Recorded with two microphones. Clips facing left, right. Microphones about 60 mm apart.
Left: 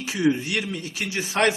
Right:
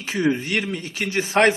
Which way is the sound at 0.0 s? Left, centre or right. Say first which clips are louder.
Right 1 dB; right.